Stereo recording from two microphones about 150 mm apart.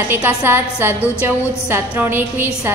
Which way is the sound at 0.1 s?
15° right (ahead or behind).